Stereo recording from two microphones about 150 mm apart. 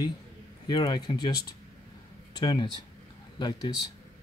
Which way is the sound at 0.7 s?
25° left (ahead or behind).